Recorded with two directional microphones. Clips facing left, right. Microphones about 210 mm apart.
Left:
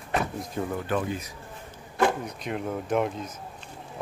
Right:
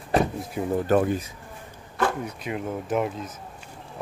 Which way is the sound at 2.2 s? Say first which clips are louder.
Right 1 dB; 5° right (ahead or behind).